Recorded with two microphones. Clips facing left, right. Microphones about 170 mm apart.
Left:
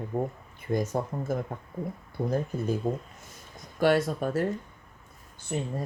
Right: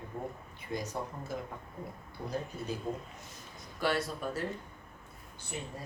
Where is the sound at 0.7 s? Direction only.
50° left (ahead or behind).